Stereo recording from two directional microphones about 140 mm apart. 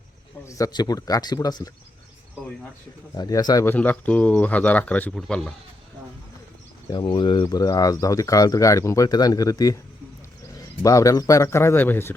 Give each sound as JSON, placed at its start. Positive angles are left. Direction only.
{"t": 0.4, "sound": "speech", "side_deg": 25}
{"t": 3.2, "sound": "speech", "side_deg": 30}
{"t": 3.7, "sound": "speech", "side_deg": 10}
{"t": 6.9, "sound": "speech", "side_deg": 35}